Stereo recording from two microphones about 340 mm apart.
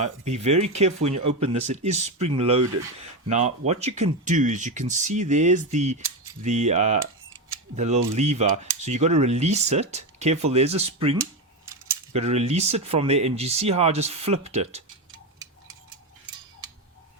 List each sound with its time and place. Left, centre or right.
0.0 s cutlery: centre
12.1 s speech: centre